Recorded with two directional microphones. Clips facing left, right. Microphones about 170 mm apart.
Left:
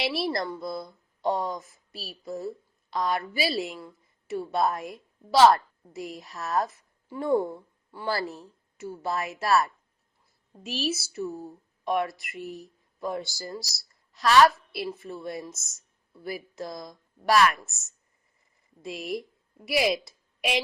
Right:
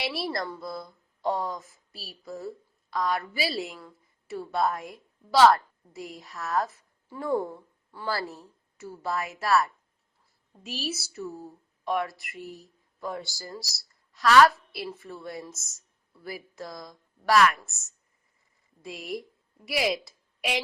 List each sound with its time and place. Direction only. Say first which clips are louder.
0.0 s a woman's voice: left 3 dB; 20° left (ahead or behind)
10.8 s a woman's voice: left 5 dB; 20° left (ahead or behind)
18.8 s a woman's voice: left 3 dB; 25° left (ahead or behind)